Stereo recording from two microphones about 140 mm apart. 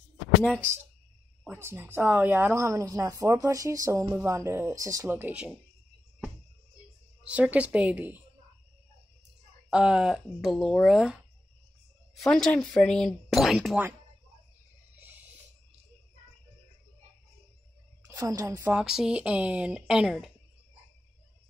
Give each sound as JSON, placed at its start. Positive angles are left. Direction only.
{"t": 0.4, "sound": "speech", "side_deg": 10}
{"t": 1.5, "sound": "a woman's voice", "side_deg": -20}
{"t": 7.2, "sound": "speech", "side_deg": -10}
{"t": 9.7, "sound": "speech", "side_deg": -5}
{"t": 12.2, "sound": "speech", "side_deg": 5}
{"t": 15.0, "sound": "a sound", "side_deg": -10}
{"t": 18.0, "sound": "a woman's voice", "side_deg": -20}
{"t": 18.7, "sound": "speech", "side_deg": -5}